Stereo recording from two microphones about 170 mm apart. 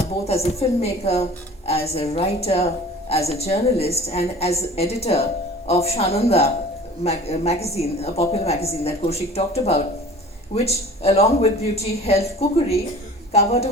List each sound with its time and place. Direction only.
0.3 s a woman's voice: 35° left (ahead or behind)